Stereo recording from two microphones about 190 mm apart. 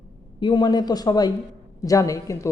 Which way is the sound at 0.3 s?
20° left (ahead or behind).